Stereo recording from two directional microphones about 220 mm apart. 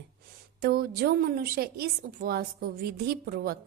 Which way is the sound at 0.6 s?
45° right (ahead or behind).